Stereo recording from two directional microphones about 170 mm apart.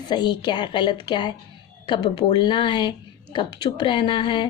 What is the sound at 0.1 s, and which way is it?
A child's voice, 25° left (ahead or behind).